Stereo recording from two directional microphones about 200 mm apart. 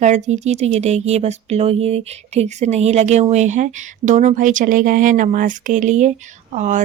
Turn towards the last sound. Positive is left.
turn(degrees=-35)  # may be behind; listen again after turning